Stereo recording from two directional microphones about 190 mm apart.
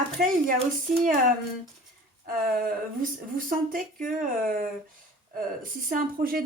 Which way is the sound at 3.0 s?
45° right (ahead or behind).